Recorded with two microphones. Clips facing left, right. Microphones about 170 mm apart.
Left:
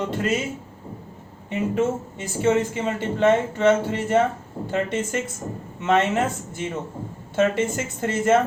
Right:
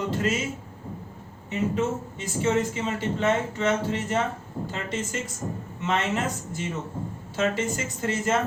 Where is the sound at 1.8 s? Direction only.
55° left (ahead or behind).